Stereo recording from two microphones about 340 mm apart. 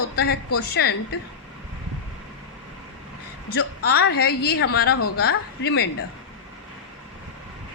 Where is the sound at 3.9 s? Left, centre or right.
Left.